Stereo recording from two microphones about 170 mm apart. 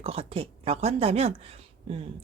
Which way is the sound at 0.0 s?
35° right (ahead or behind).